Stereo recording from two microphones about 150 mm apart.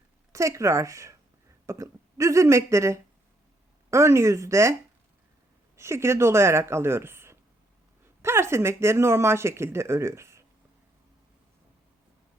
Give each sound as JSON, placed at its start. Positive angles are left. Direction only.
{"t": 0.3, "sound": "speech", "side_deg": -20}
{"t": 5.7, "sound": "speech", "side_deg": -20}